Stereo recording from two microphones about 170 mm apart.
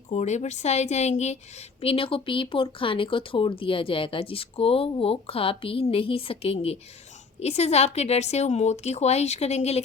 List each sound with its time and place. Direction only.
0.1 s speech: 40° left (ahead or behind)